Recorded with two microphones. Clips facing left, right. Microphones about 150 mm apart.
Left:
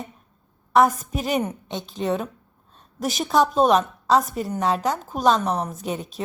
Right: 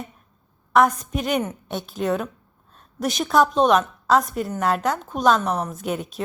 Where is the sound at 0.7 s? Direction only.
Centre (ahead or behind).